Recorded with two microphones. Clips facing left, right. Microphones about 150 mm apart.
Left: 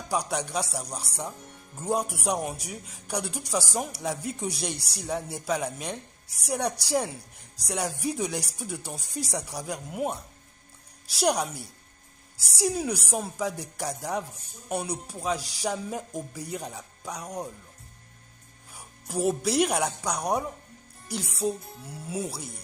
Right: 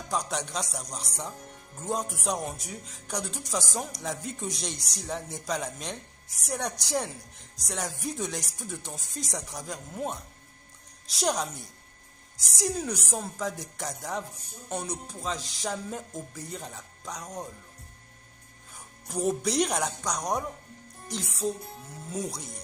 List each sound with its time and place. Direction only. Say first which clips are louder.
0.1 s speech: left 3 dB; 10° left (ahead or behind)
18.7 s speech: left 2 dB; 10° left (ahead or behind)
21.4 s music: left 2 dB; 5° left (ahead or behind)
22.1 s speech: left 1 dB; 5° left (ahead or behind)